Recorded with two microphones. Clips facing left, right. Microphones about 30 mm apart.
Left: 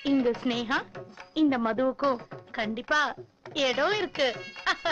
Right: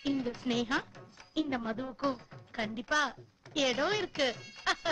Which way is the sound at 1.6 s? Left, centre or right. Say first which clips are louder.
Left 11 dB; left.